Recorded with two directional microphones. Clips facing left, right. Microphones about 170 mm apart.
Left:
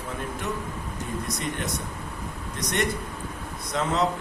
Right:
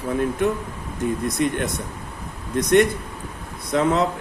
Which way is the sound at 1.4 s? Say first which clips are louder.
Right 13 dB; 60° right (ahead or behind).